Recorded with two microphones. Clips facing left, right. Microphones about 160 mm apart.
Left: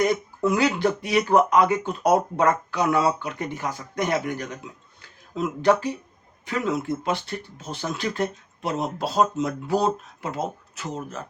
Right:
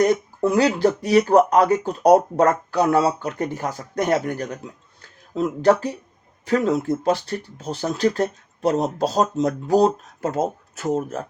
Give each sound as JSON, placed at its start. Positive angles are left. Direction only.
{"t": 0.0, "sound": "speech", "side_deg": -40}